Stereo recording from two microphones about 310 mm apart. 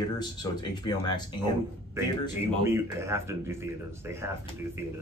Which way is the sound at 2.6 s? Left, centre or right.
Centre.